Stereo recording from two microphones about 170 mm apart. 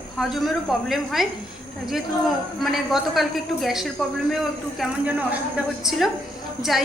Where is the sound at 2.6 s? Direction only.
Centre (ahead or behind).